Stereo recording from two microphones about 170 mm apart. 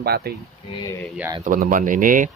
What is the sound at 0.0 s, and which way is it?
Speech, 65° right (ahead or behind).